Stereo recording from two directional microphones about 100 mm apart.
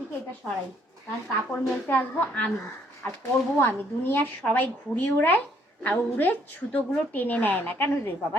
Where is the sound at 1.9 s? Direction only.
15° left (ahead or behind).